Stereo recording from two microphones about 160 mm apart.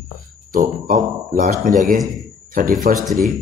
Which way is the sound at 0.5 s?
60° right (ahead or behind).